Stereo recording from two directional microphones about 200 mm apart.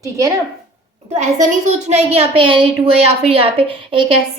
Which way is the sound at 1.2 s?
35° right (ahead or behind).